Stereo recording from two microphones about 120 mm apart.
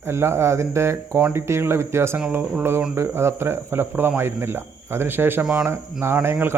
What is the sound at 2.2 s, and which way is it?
Speech, 10° right (ahead or behind).